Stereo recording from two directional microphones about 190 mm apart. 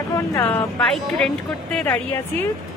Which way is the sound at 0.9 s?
Centre (ahead or behind).